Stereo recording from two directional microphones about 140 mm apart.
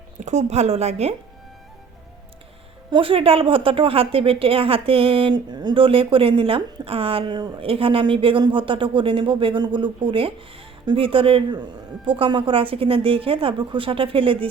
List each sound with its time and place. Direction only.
0.2 s a woman's voice: 55° right (ahead or behind)
2.9 s a woman's voice: 40° right (ahead or behind)